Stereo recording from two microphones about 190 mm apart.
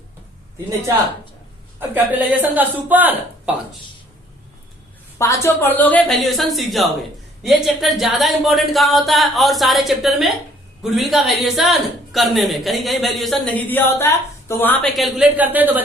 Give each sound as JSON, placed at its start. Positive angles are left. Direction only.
{"t": 1.9, "sound": "speech", "side_deg": -10}
{"t": 5.1, "sound": "a woman's voice", "side_deg": 15}